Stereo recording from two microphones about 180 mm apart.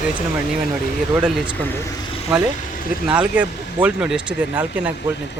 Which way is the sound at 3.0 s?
5° right (ahead or behind).